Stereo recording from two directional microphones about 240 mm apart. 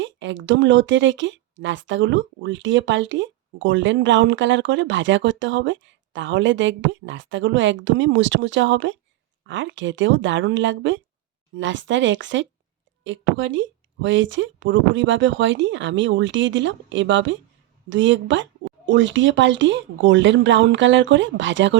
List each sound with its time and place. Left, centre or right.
0.0 s speech: right